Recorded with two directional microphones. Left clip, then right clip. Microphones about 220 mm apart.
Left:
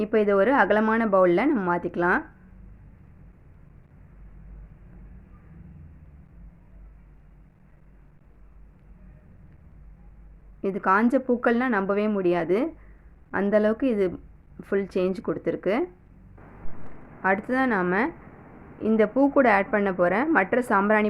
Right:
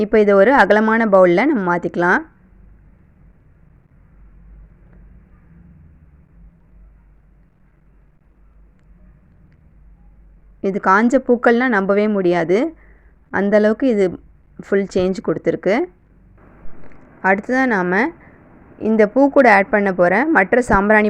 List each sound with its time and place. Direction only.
0.0 s speech: 35° right (ahead or behind)
10.6 s speech: 30° right (ahead or behind)
17.2 s a woman's voice: 25° right (ahead or behind)